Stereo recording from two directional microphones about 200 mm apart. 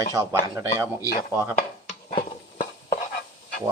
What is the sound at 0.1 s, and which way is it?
Speech, 15° right (ahead or behind).